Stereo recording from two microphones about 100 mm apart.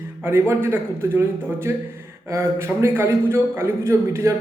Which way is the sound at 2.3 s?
25° right (ahead or behind).